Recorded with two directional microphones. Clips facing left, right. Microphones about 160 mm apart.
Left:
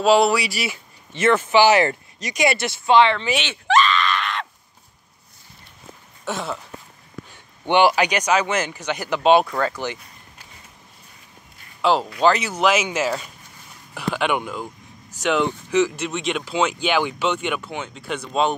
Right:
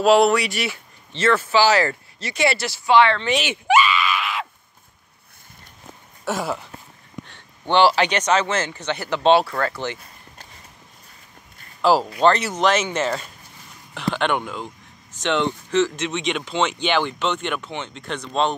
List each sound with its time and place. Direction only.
0.0 s speech: centre (ahead or behind); by 3.3 s 20° left (ahead or behind)
3.4 s screaming: 10° right (ahead or behind)
6.2 s speech: 5° right (ahead or behind)
7.2 s speech: 10° left (ahead or behind)
11.8 s speech: centre (ahead or behind)